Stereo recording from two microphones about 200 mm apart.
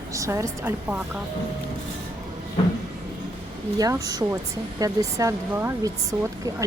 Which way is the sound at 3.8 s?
20° right (ahead or behind).